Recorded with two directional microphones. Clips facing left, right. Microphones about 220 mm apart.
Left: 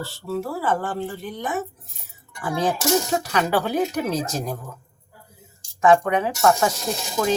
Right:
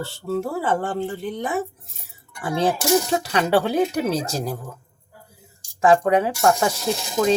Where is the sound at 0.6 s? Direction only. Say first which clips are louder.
Right 2 dB; 25° right (ahead or behind).